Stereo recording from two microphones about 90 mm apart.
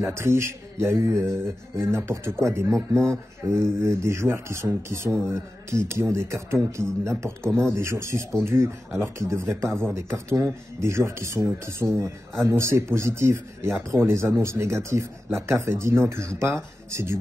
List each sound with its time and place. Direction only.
0.0 s speech: 30° right (ahead or behind)